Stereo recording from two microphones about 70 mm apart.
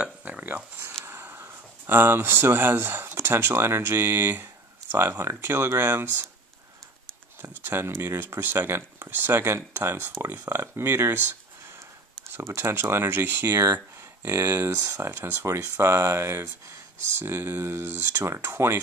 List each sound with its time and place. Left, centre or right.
0.0 s a sound: centre
1.0 s speech: right
7.4 s speech: right
12.3 s speech: right
13.5 s speech: right
14.3 s speech: right